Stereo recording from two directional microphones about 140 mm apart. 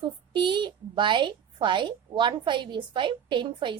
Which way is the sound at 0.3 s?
35° right (ahead or behind).